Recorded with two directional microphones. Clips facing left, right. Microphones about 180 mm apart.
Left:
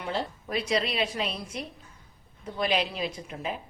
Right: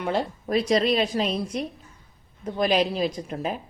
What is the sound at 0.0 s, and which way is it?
Speech, 50° right (ahead or behind).